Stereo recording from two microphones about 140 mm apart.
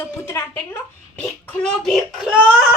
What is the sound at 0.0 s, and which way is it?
Speech, 15° left (ahead or behind).